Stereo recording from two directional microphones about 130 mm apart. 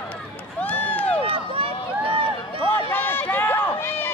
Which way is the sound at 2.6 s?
15° left (ahead or behind).